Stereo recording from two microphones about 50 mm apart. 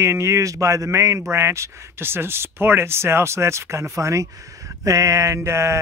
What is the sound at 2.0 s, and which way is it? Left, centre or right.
Speech, right.